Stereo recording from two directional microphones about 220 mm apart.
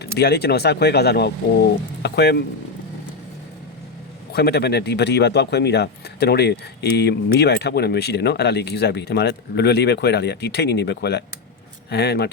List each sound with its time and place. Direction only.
0.2 s speech: 45° left (ahead or behind)
4.3 s speech: 45° left (ahead or behind)